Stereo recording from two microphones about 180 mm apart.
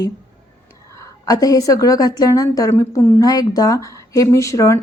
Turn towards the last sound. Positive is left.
turn(degrees=15)  # may be behind; listen again after turning